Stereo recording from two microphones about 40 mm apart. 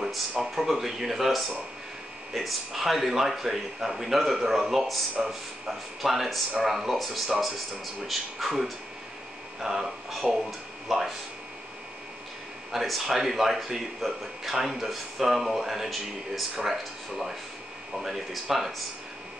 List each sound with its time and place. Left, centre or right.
0.4 s speech: centre
5.2 s speech: centre
5.7 s speech: centre
12.7 s speech: centre